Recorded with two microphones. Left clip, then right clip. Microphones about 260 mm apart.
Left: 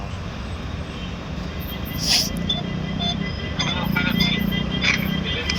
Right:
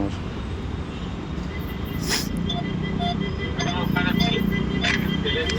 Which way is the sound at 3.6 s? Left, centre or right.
Centre.